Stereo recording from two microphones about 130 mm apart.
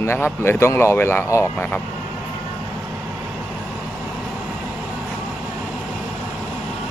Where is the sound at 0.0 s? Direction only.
20° left (ahead or behind).